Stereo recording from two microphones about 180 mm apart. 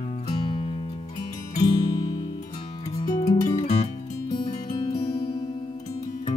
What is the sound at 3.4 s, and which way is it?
Music, 35° left (ahead or behind).